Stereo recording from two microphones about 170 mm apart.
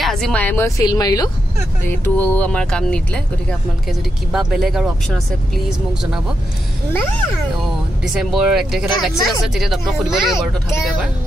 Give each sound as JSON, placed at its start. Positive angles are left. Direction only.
{"t": 0.0, "sound": "a woman's voice", "side_deg": 5}
{"t": 1.9, "sound": "a woman's voice", "side_deg": 10}
{"t": 4.3, "sound": "speech", "side_deg": -5}
{"t": 6.9, "sound": "a woman's voice", "side_deg": 10}
{"t": 8.1, "sound": "speech", "side_deg": 0}